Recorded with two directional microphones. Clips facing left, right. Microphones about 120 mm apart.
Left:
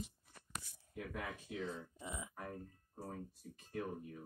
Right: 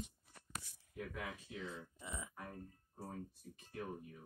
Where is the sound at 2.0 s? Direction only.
20° left (ahead or behind).